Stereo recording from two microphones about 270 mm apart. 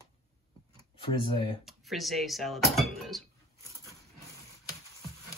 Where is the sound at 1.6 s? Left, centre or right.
Centre.